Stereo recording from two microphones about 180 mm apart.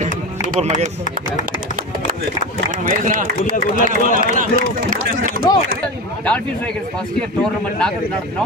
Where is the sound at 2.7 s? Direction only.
45° right (ahead or behind).